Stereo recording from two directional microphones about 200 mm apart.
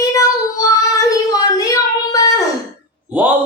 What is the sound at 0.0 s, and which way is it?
Child singing, 15° left (ahead or behind).